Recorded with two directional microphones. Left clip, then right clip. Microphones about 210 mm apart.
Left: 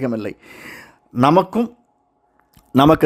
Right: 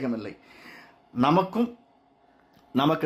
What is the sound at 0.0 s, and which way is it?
Speech, 55° left (ahead or behind).